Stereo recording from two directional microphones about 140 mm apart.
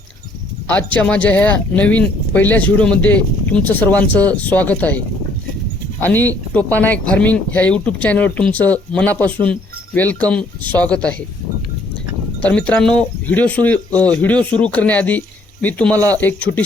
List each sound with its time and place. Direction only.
0.9 s speech: 10° left (ahead or behind)
12.4 s speech: 10° left (ahead or behind)